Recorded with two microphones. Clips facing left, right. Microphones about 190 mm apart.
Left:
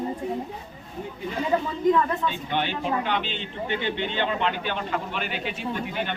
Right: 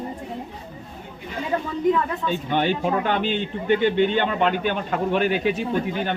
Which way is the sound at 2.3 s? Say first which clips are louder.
Right 5 dB; 45° right (ahead or behind).